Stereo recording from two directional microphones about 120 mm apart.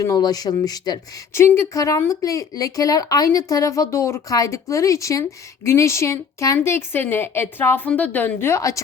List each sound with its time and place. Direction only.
0.0 s speech: 30° left (ahead or behind)